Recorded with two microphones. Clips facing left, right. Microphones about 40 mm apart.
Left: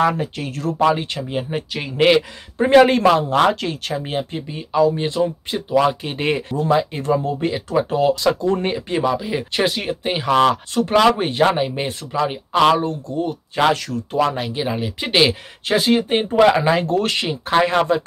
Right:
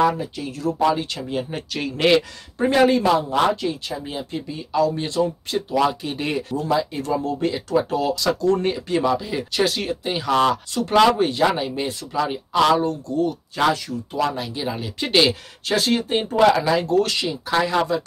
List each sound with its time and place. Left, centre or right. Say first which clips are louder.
0.2 s speech: left 2 dB; left
0.8 s speech: left 3 dB; left
2.7 s speech: left 5 dB; left
4.3 s speech: left 1 dB; left